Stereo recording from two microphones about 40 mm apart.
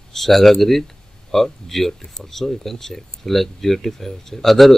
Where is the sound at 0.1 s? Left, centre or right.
Centre.